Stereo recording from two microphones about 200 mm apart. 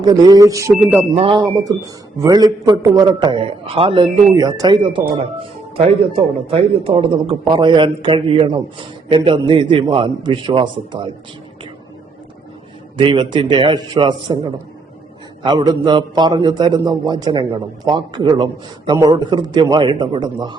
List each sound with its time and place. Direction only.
0.0 s speech: 20° right (ahead or behind)
0.8 s speech: centre (ahead or behind)
1.1 s a man's voice: 25° right (ahead or behind)
13.0 s a man's voice: 25° right (ahead or behind)